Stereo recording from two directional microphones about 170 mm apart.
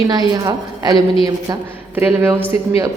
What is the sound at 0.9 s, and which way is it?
Speech, 30° left (ahead or behind).